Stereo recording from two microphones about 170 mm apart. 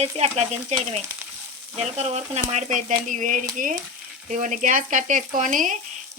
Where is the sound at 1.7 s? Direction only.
40° right (ahead or behind).